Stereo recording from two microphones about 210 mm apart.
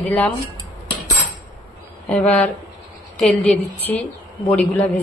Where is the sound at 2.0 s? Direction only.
5° left (ahead or behind).